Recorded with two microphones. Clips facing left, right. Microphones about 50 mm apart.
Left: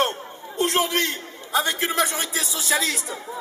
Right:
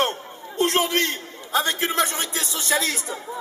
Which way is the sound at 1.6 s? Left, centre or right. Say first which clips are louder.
Even; centre.